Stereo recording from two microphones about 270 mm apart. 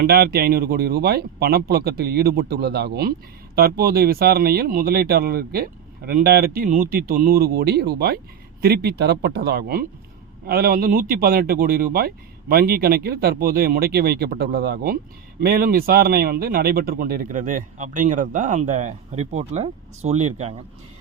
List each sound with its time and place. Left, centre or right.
0.0 s a man's voice: right